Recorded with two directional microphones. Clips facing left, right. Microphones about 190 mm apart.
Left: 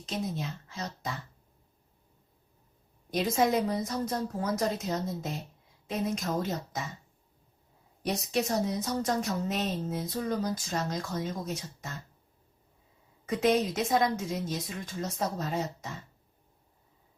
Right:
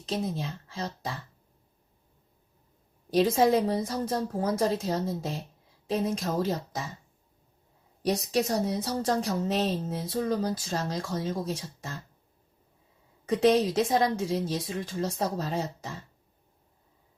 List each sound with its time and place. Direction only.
0.0 s a woman's voice: 30° right (ahead or behind)
3.1 s a woman's voice: 30° right (ahead or behind)
8.0 s a woman's voice: 35° right (ahead or behind)
13.3 s a woman's voice: 35° right (ahead or behind)